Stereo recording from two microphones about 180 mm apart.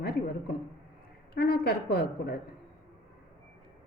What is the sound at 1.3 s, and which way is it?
A woman's voice, 60° left (ahead or behind).